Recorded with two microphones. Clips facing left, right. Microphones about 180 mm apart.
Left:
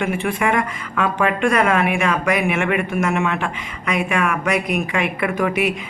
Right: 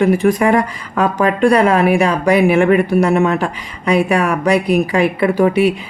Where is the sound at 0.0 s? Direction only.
40° right (ahead or behind).